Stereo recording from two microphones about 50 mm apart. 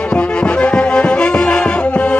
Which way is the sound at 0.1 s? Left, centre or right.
Left.